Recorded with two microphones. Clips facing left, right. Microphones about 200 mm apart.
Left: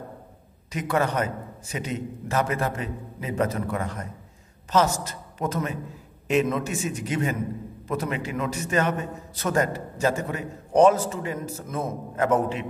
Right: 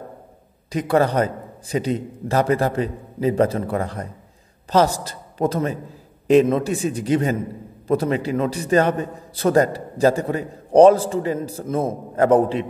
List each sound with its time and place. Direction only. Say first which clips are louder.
0.7 s a man's voice: right 6 dB; 35° right (ahead or behind)